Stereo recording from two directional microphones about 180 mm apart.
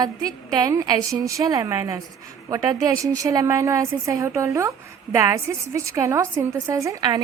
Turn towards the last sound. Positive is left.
turn(degrees=-20)  # may be behind; listen again after turning